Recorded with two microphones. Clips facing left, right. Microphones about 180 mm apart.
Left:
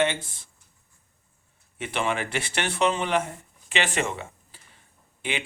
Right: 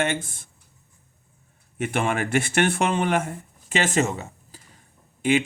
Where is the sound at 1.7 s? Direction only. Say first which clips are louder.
Right 3 dB; 50° right (ahead or behind).